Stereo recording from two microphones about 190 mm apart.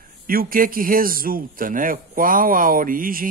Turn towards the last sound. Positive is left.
turn(degrees=-45)  # may be behind; listen again after turning